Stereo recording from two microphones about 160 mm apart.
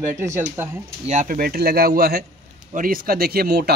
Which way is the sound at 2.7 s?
60° right (ahead or behind).